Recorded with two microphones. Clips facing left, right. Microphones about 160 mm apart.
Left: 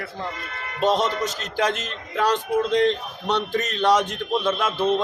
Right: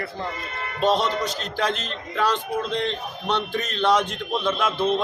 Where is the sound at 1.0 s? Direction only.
45° left (ahead or behind).